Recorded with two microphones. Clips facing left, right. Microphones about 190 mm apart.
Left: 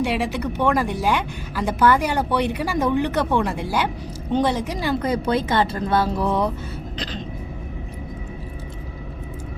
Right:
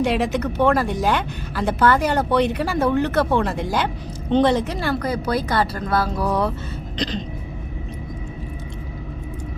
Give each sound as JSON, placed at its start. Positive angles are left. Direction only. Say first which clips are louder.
{"t": 0.0, "sound": "speech", "louder": "right 2 dB", "side_deg": 10}
{"t": 4.9, "sound": "speech", "louder": "left 4 dB", "side_deg": 30}